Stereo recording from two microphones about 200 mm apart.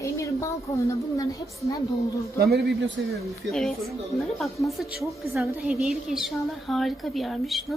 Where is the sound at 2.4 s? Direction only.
55° right (ahead or behind).